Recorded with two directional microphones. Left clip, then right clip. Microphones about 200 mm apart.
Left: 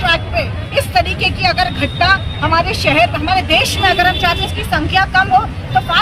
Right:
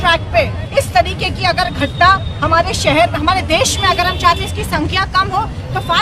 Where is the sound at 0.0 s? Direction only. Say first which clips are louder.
Right 2 dB; 10° right (ahead or behind).